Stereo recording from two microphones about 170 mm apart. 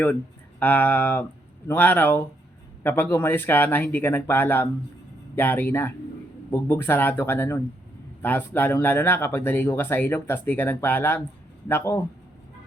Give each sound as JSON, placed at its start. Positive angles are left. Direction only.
{"t": 0.6, "sound": "speech", "side_deg": 10}